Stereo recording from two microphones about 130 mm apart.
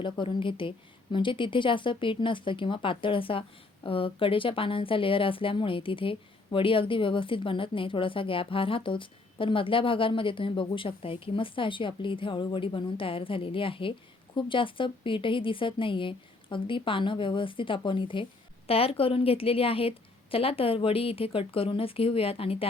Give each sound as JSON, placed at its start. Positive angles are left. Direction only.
{"t": 0.0, "sound": "a woman's voice", "side_deg": 40}